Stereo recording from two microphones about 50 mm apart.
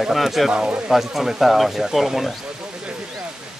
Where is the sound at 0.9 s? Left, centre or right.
Centre.